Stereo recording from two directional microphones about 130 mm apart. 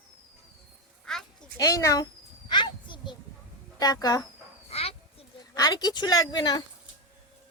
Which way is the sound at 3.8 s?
30° left (ahead or behind).